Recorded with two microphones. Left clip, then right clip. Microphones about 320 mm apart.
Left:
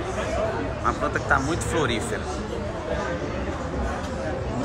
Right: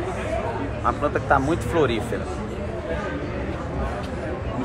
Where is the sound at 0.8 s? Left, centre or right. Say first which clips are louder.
Right 2 dB; centre.